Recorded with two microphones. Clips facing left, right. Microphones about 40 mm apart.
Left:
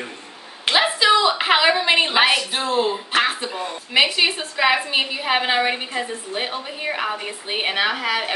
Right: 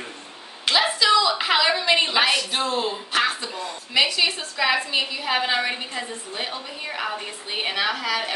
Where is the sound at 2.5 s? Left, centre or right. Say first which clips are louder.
Left 3 dB; centre.